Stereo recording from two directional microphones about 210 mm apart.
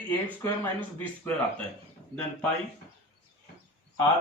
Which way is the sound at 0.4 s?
10° left (ahead or behind).